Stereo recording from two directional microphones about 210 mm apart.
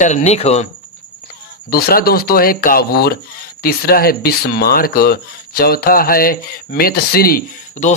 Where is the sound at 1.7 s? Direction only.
45° left (ahead or behind).